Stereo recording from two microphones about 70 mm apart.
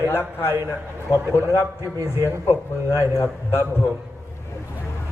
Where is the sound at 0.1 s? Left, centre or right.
Left.